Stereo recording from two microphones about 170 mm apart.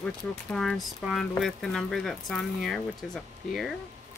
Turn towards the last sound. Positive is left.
turn(degrees=0)  # may be behind; listen again after turning